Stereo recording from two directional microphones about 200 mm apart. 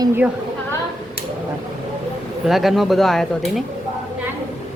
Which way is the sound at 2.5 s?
Centre (ahead or behind).